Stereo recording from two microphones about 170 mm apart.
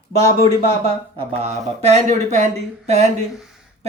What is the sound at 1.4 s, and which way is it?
Speech, 40° right (ahead or behind).